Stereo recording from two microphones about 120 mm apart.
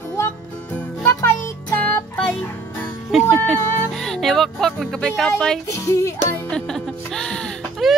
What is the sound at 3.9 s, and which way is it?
Music, 5° left (ahead or behind).